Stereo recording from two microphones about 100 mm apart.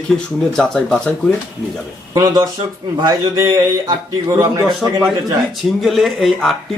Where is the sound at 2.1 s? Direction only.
40° right (ahead or behind).